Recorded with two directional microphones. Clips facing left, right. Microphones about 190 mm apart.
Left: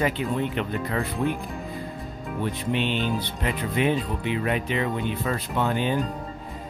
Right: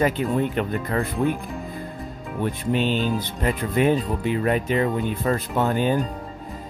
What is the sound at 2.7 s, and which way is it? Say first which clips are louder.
Music: right 4 dB; 40° right (ahead or behind).